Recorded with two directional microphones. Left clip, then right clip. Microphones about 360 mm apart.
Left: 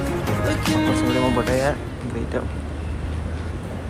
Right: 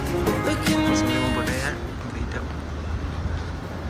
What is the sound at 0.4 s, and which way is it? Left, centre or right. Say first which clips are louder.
Music: left 5 dB; centre.